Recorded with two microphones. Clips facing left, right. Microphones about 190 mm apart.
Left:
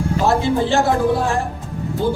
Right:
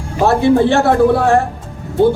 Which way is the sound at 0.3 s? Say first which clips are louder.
Right 7 dB; 60° right (ahead or behind).